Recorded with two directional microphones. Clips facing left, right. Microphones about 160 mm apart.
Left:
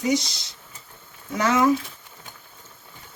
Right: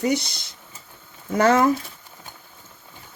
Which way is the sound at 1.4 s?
50° right (ahead or behind).